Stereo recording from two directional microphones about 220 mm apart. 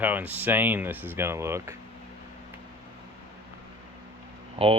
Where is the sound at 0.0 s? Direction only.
10° right (ahead or behind).